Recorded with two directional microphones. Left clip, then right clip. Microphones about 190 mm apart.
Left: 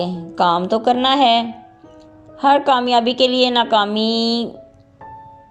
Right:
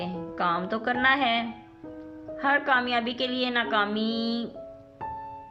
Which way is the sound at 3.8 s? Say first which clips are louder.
Left 11 dB; 20° left (ahead or behind).